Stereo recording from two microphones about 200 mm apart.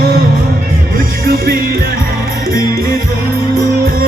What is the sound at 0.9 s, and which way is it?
Music, 45° right (ahead or behind).